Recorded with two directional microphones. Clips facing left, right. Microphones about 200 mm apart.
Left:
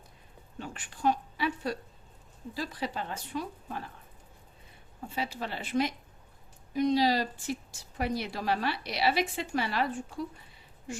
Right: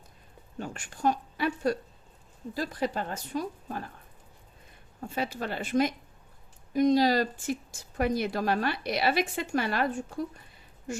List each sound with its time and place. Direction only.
0.6 s a woman's voice: 45° right (ahead or behind)
5.1 s speech: 50° right (ahead or behind)